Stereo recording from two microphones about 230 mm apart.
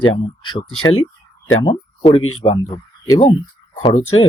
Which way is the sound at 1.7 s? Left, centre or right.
Left.